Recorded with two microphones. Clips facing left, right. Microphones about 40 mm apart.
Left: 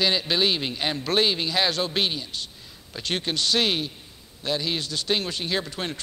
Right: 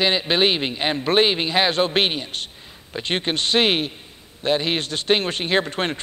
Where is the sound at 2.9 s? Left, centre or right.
Right.